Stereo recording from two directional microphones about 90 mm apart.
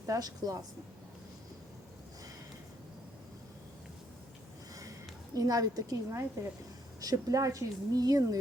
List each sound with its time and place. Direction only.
0.0 s a woman's voice: 45° right (ahead or behind)
5.3 s a woman's voice: 45° right (ahead or behind)